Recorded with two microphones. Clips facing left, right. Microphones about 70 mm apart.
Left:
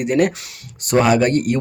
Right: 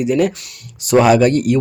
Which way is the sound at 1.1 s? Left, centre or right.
Left.